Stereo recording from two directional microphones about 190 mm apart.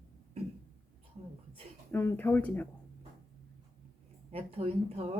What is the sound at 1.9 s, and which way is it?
Speech, 10° left (ahead or behind).